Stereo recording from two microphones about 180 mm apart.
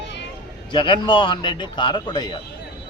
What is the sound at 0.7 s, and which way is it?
A man's voice, 25° left (ahead or behind).